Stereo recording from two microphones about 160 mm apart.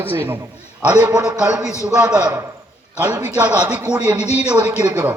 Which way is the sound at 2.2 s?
20° right (ahead or behind).